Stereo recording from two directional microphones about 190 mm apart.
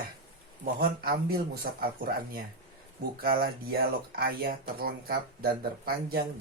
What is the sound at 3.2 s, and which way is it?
Speech, 50° right (ahead or behind).